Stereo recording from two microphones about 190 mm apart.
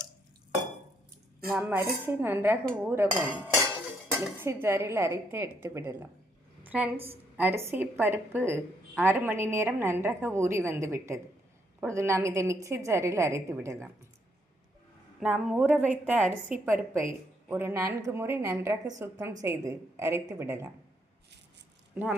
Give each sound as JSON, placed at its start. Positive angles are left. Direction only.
{"t": 1.5, "sound": "a woman's voice", "side_deg": -10}
{"t": 6.6, "sound": "a sound", "side_deg": -10}
{"t": 7.0, "sound": "a woman's voice", "side_deg": -10}
{"t": 15.2, "sound": "a woman's voice", "side_deg": 0}